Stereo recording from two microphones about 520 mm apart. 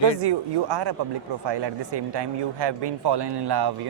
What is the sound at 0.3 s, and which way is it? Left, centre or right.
Speech, right.